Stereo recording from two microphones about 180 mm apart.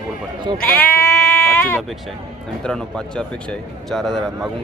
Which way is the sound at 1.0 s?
15° left (ahead or behind).